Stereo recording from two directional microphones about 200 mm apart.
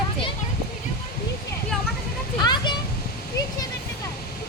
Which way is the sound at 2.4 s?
20° left (ahead or behind).